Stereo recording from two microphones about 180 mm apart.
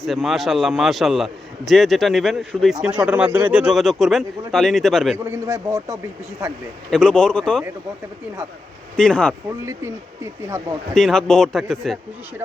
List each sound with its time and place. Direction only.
0.0 s a man's voice: centre (ahead or behind)
5.1 s speech: 15° right (ahead or behind)
6.9 s a man's voice: 5° left (ahead or behind)
9.0 s a man's voice: 5° left (ahead or behind)
9.5 s speech: 15° right (ahead or behind)
10.9 s a man's voice: 5° left (ahead or behind)